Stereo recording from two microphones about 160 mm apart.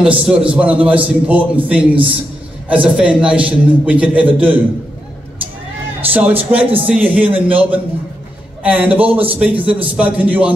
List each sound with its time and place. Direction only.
0.0 s a man's voice: 5° right (ahead or behind)
5.9 s a man's voice: 10° right (ahead or behind)